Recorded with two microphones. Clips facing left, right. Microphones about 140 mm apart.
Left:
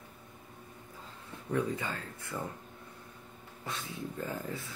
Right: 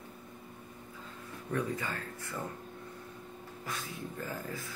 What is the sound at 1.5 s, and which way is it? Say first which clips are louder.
Speech: left 2 dB; 15° left (ahead or behind).